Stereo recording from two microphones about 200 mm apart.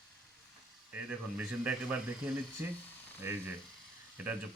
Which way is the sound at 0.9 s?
5° right (ahead or behind).